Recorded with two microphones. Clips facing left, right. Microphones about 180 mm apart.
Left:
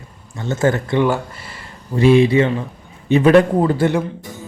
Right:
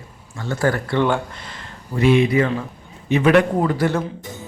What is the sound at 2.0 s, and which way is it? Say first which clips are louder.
A man's voice: left 4 dB; 30° left (ahead or behind).